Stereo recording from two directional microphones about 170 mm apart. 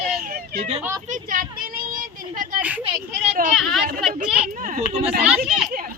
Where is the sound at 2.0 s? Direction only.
55° right (ahead or behind).